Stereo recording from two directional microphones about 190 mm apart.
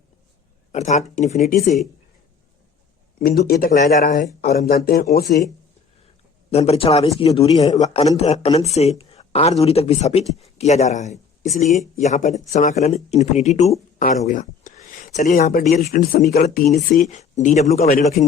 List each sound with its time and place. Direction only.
0.7 s speech: 40° left (ahead or behind)
1.5 s speech: 50° left (ahead or behind)
3.2 s speech: 50° left (ahead or behind)
4.4 s speech: 55° left (ahead or behind)
6.5 s speech: 30° left (ahead or behind)
14.0 s speech: 45° left (ahead or behind)
17.7 s speech: 50° left (ahead or behind)
18.0 s speech: 40° left (ahead or behind)